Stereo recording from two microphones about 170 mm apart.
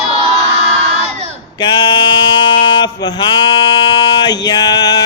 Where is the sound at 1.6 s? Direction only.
25° left (ahead or behind).